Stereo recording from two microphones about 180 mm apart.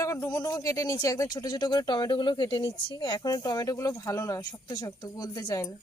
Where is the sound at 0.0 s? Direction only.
20° left (ahead or behind).